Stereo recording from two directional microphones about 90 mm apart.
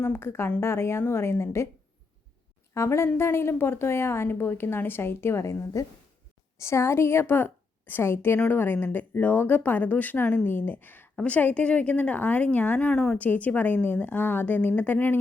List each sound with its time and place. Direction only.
0.0 s a woman's voice: 25° left (ahead or behind)
2.7 s a woman's voice: 30° left (ahead or behind)